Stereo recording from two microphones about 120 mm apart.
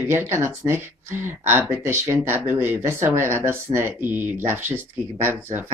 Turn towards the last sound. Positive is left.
turn(degrees=-20)  # may be behind; listen again after turning